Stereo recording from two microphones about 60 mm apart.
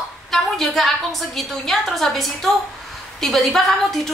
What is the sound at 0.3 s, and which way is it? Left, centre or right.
A woman's voice, centre.